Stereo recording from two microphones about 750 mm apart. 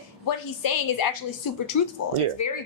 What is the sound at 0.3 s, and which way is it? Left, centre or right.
Speech, left.